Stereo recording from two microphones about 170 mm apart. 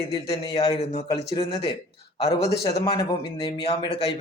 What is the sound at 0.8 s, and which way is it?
Speech, 40° left (ahead or behind).